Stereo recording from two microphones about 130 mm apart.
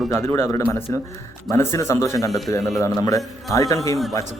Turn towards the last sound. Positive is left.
turn(degrees=25)  # may be behind; listen again after turning